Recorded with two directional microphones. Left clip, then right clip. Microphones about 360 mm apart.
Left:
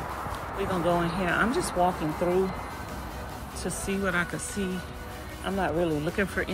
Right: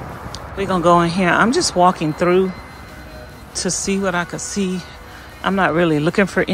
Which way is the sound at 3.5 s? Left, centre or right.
Centre.